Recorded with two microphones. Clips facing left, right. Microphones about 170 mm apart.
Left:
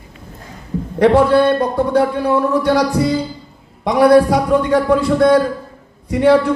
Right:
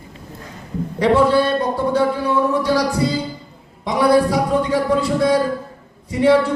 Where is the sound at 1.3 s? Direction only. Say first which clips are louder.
Left 4 dB; 60° left (ahead or behind).